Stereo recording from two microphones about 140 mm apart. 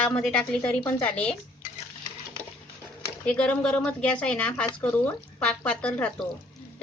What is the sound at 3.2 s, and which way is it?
Speech, 10° left (ahead or behind).